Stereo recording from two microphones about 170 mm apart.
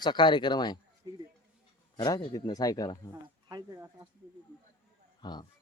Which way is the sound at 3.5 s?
20° right (ahead or behind).